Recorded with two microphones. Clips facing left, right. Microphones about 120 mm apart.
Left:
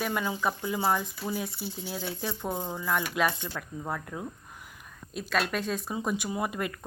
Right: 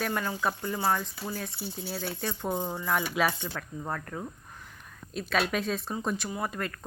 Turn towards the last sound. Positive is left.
turn(degrees=15)  # may be behind; listen again after turning